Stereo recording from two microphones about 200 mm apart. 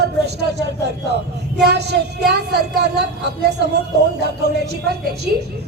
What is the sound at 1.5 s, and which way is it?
A woman's voice, 55° right (ahead or behind).